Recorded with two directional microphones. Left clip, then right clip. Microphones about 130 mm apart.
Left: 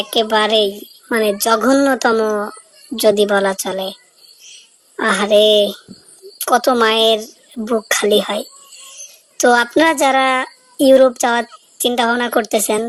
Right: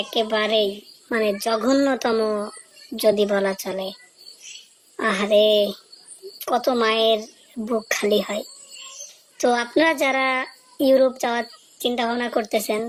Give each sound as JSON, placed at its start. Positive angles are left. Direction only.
{"t": 0.0, "sound": "a woman's voice", "side_deg": 35}
{"t": 4.9, "sound": "speech", "side_deg": 30}